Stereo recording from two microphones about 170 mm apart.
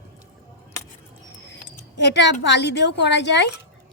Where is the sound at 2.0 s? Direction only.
85° left.